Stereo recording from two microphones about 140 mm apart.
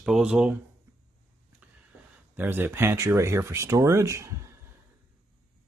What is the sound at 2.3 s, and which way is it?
Speech, 15° right (ahead or behind).